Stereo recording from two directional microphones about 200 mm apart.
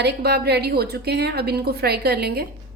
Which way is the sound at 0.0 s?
55° right (ahead or behind).